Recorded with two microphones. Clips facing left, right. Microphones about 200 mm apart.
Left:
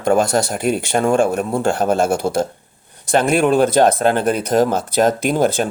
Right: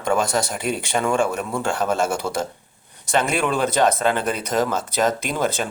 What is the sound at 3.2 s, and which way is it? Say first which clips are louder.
Speech: left 11 dB; 50° left (ahead or behind).